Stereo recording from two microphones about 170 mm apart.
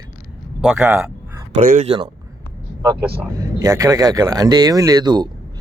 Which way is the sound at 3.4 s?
20° right (ahead or behind).